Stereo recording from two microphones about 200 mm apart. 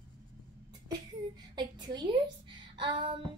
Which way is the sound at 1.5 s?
20° right (ahead or behind).